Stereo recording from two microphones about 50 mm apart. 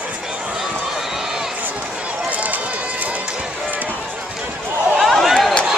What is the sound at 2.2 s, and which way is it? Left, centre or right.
Run, right.